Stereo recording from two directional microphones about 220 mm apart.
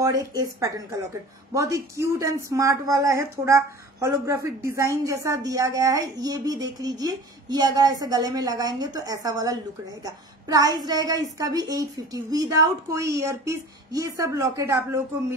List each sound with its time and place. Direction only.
0.0 s a woman's voice: 15° right (ahead or behind)